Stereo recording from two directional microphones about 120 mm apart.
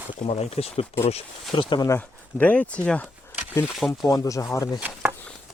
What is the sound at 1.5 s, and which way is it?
Speech, 40° left (ahead or behind).